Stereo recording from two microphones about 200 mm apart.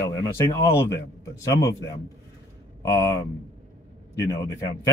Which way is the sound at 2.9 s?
15° left (ahead or behind).